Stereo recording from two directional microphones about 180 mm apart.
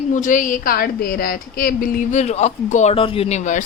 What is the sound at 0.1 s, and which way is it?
A woman's voice, 45° left (ahead or behind).